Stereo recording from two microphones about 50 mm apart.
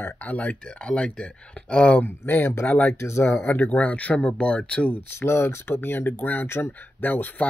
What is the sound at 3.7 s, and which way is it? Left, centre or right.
Speech, left.